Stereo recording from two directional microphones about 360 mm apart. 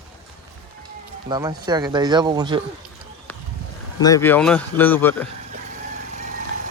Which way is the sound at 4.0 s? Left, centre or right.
Centre.